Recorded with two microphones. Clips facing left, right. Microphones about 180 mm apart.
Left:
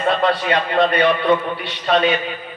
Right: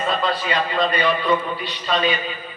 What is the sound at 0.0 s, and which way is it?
A man's voice, 65° left (ahead or behind).